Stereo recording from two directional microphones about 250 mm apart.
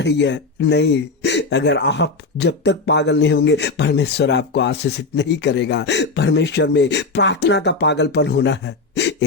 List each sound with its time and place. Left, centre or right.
0.0 s speech: left